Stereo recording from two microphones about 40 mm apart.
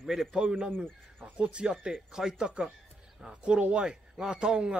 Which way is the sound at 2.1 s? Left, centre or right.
Centre.